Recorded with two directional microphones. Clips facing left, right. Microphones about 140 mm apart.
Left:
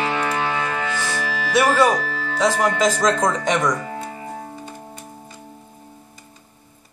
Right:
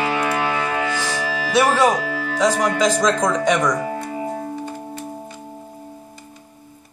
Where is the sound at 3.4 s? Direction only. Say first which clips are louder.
Right 2 dB; 15° right (ahead or behind).